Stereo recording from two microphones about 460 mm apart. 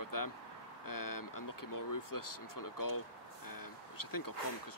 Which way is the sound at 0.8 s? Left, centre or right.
Left.